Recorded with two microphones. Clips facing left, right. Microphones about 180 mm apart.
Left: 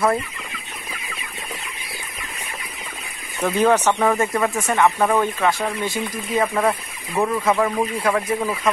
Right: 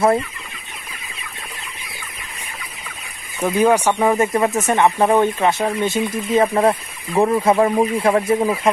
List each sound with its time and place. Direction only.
3.3 s speech: 10° right (ahead or behind); by 8.5 s 30° right (ahead or behind)